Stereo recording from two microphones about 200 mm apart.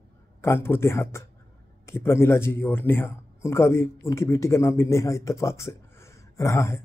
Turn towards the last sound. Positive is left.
turn(degrees=15)  # may be behind; listen again after turning